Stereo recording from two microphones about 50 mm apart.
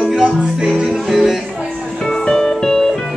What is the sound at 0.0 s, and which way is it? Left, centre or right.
Music, centre.